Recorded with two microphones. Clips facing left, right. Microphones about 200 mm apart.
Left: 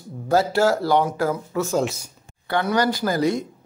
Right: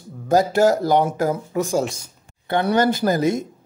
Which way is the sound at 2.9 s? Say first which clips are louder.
Right 2 dB; 20° right (ahead or behind).